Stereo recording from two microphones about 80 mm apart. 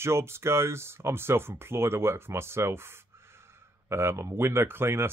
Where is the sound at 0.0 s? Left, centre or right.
Right.